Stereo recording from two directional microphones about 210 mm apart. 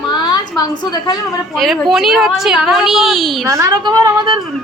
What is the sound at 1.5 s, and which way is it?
A woman's voice, centre (ahead or behind).